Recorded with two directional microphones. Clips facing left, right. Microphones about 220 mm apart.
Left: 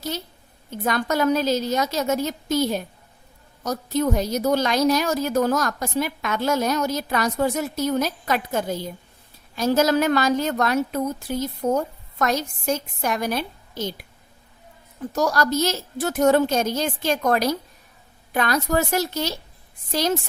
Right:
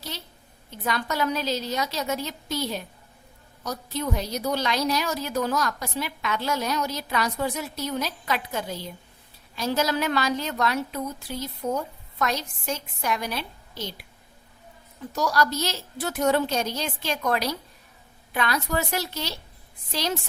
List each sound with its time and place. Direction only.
0.7 s a woman's voice: 45° left (ahead or behind)
15.1 s a woman's voice: 45° left (ahead or behind)